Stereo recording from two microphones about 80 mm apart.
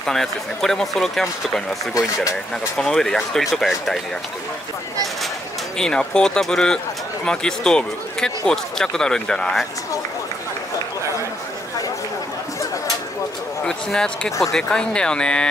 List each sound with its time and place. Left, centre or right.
0.0 s speech: centre
2.8 s speech: centre
5.8 s speech: centre
13.7 s speech: centre